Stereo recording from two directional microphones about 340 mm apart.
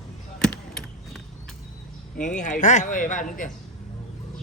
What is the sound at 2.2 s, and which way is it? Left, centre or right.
Speech, left.